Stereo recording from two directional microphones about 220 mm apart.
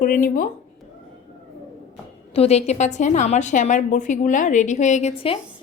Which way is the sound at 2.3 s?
30° left (ahead or behind).